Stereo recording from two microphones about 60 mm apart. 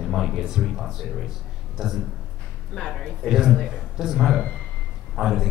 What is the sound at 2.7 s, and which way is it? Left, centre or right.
Speech, centre.